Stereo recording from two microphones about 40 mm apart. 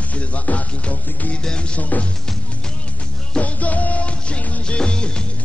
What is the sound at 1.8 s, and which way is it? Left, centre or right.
Music, left.